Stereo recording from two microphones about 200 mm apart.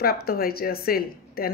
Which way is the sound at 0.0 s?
50° left (ahead or behind).